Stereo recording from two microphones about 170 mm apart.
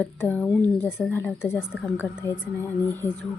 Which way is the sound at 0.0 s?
10° left (ahead or behind).